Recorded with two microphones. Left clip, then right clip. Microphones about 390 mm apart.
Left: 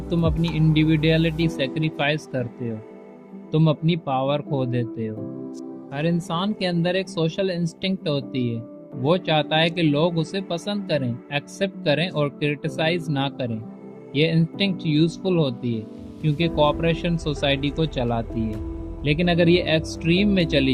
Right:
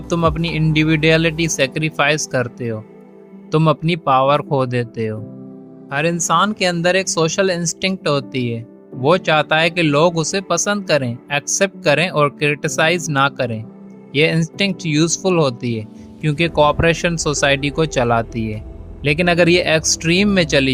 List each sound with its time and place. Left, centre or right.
0.1 s speech: right